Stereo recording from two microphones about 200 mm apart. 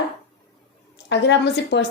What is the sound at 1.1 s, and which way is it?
Speech, 60° left (ahead or behind).